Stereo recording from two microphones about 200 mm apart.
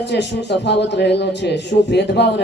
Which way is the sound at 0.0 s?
60° left (ahead or behind).